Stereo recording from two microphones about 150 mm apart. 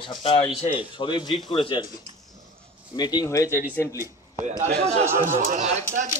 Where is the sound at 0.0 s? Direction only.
35° left (ahead or behind).